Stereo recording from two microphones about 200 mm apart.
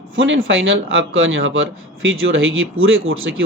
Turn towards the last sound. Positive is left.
turn(degrees=-80)